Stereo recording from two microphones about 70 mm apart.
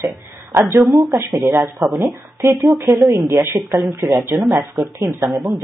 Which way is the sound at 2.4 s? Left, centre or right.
Right.